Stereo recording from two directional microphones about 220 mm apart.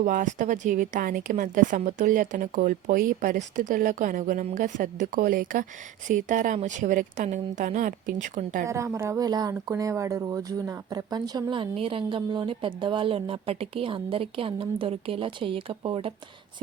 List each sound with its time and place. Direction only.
0.0 s a woman's voice: 35° right (ahead or behind)
8.6 s speech: 10° right (ahead or behind)